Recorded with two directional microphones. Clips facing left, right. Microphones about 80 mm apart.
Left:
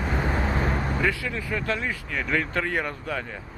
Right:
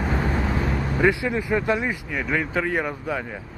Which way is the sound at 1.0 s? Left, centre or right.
Right.